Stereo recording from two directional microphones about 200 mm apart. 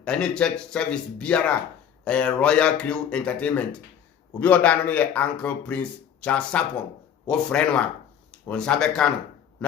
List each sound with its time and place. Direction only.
0.0 s speech: 5° left (ahead or behind)